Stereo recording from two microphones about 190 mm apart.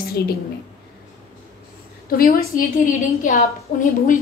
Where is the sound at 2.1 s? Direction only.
50° left (ahead or behind).